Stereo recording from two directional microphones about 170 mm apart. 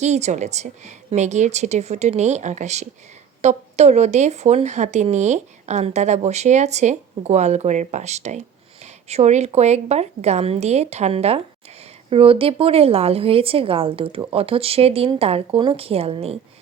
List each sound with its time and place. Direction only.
0.0 s a woman's voice: 40° right (ahead or behind)